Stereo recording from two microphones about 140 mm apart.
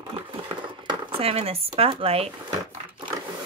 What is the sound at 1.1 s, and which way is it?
Speech, 45° right (ahead or behind).